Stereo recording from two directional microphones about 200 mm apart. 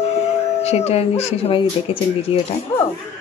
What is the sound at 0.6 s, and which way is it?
Speech, 30° left (ahead or behind).